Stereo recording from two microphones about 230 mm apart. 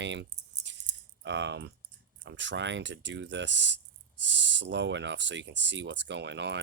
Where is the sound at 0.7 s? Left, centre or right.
Right.